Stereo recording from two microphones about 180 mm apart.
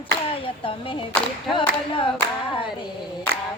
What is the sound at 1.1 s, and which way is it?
A capella, 5° left (ahead or behind).